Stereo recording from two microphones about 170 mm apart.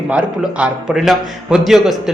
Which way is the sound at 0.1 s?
10° right (ahead or behind).